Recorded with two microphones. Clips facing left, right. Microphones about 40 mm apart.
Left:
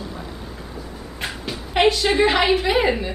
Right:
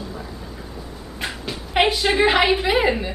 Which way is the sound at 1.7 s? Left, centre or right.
Centre.